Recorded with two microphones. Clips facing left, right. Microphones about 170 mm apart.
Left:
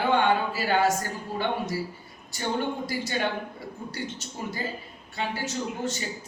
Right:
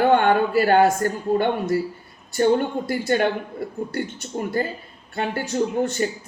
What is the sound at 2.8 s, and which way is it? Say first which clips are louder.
Speech: right 8 dB; 55° right (ahead or behind).